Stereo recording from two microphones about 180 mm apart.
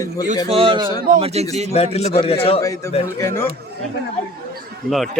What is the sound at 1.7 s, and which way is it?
Speech, 35° left (ahead or behind).